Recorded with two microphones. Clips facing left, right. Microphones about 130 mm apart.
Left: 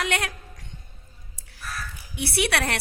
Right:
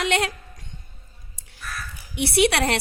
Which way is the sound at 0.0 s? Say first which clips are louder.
Right 4 dB; 25° right (ahead or behind).